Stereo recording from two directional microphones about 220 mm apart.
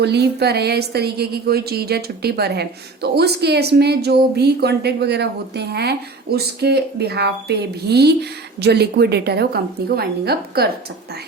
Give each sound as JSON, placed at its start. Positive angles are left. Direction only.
{"t": 0.0, "sound": "a woman's voice", "side_deg": -50}